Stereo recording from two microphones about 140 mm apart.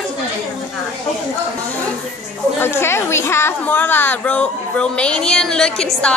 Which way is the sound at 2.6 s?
20° left (ahead or behind).